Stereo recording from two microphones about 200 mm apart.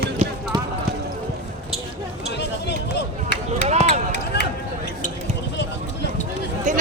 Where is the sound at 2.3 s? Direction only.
55° left (ahead or behind).